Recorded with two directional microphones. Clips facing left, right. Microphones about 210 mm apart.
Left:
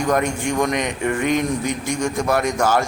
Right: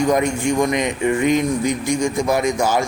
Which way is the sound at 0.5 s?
10° right (ahead or behind).